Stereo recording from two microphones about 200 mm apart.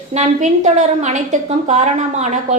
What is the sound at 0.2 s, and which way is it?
A woman's voice, 35° right (ahead or behind).